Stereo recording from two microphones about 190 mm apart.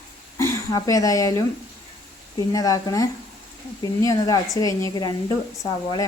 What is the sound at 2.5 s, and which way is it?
Speech, 20° left (ahead or behind).